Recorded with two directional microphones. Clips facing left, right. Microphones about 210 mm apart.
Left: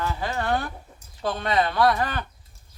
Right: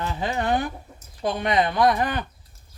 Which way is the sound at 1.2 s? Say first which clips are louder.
Right 2 dB; 15° right (ahead or behind).